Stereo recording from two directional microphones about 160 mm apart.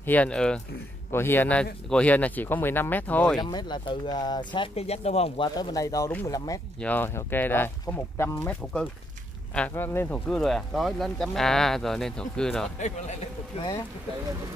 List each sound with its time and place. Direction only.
0.0 s speech: 10° left (ahead or behind)
3.4 s speech: 30° left (ahead or behind)
5.6 s speech: 25° left (ahead or behind); by 12.6 s 5° left (ahead or behind)